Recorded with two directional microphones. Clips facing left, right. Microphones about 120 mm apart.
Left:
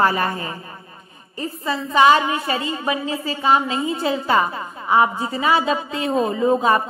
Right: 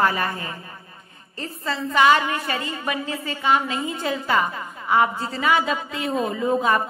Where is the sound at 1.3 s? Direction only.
15° left (ahead or behind).